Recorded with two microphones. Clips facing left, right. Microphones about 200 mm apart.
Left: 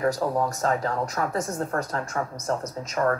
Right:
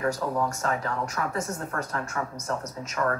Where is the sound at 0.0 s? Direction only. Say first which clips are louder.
Left 3 dB; 35° left (ahead or behind).